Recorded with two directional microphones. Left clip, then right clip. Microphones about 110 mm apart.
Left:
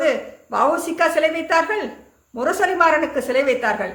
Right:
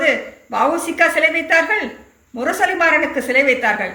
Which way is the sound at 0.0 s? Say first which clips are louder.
Right 3 dB; 35° left (ahead or behind).